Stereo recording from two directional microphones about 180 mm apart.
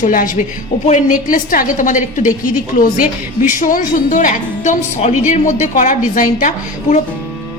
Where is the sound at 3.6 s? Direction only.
50° left (ahead or behind).